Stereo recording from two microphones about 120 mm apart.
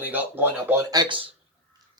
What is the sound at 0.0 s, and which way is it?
Speech, 15° right (ahead or behind).